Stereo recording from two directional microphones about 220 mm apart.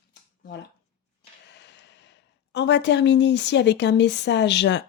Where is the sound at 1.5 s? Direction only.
50° left (ahead or behind).